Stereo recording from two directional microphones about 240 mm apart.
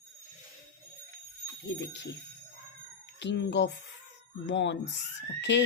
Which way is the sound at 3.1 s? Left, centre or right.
Left.